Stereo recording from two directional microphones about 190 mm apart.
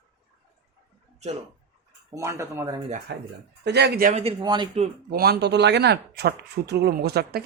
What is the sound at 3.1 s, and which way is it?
Speech, 60° right (ahead or behind).